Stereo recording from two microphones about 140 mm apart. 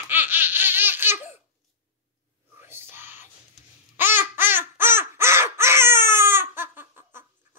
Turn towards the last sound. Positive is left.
turn(degrees=-15)  # may be behind; listen again after turning